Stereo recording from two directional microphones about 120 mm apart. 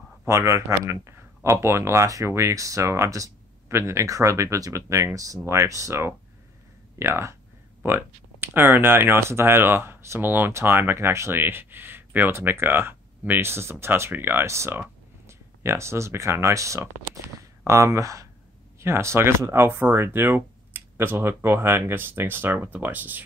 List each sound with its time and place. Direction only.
0.3 s speech: 25° right (ahead or behind)